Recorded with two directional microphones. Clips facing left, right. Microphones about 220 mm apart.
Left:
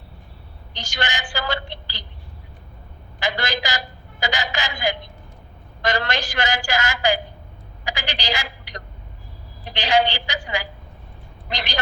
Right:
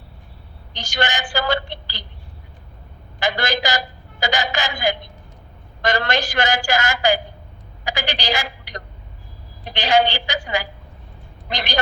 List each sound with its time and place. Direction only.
0.8 s a woman's voice: 45° right (ahead or behind)
3.2 s a man's voice: 45° right (ahead or behind)